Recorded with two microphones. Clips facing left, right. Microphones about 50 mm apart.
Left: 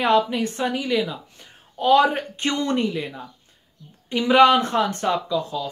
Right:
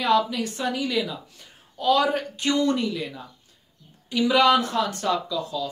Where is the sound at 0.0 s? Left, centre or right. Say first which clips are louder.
Left 2 dB; left.